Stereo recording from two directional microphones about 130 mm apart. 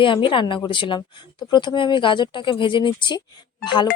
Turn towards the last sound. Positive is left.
turn(degrees=35)  # may be behind; listen again after turning